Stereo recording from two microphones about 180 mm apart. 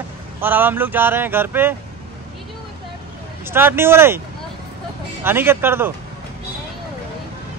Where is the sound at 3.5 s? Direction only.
10° right (ahead or behind).